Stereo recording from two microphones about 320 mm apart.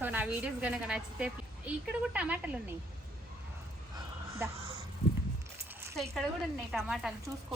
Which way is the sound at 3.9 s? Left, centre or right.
Centre.